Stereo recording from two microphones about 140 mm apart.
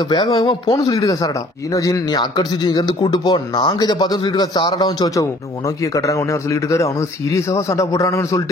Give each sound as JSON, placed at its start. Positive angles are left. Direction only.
{"t": 0.1, "sound": "a man's voice", "side_deg": 35}